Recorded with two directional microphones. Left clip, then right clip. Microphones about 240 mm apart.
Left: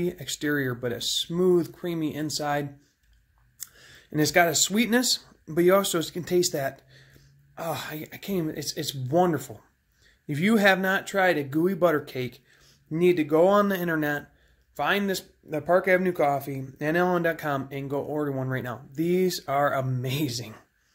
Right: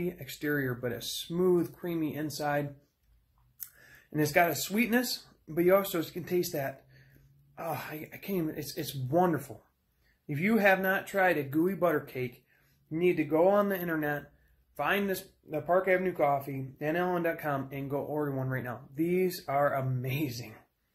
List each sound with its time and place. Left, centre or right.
0.0 s speech: left
4.1 s speech: left